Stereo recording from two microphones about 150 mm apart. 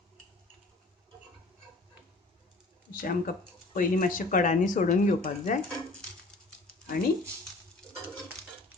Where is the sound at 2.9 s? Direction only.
70° left (ahead or behind); by 5.5 s 55° left (ahead or behind).